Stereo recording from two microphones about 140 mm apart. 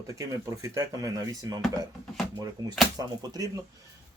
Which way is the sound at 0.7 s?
25° right (ahead or behind).